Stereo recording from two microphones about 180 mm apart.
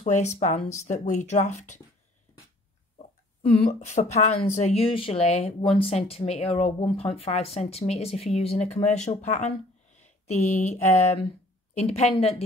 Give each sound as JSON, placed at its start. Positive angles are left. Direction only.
{"t": 0.0, "sound": "speech", "side_deg": 40}
{"t": 3.4, "sound": "speech", "side_deg": 35}